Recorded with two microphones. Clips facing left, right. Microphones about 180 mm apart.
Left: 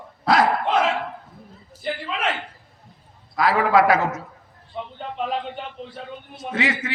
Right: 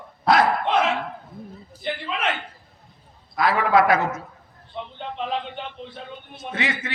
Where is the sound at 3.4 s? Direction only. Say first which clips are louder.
Left 1 dB; 35° left (ahead or behind).